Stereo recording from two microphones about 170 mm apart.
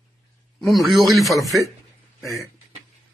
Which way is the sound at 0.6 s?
Centre (ahead or behind).